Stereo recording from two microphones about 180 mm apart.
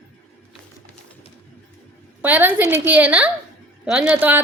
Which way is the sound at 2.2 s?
10° right (ahead or behind).